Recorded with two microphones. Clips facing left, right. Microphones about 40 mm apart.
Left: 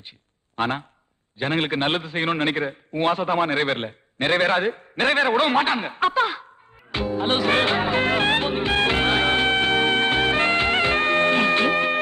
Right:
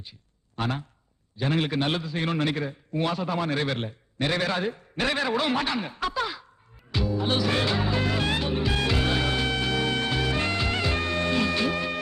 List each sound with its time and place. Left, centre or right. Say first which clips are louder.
0.5 s a man's voice: left 5 dB; left
6.9 s music: left 3 dB; left